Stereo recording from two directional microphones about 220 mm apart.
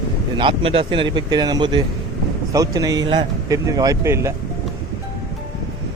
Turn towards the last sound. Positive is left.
turn(degrees=-10)  # may be behind; listen again after turning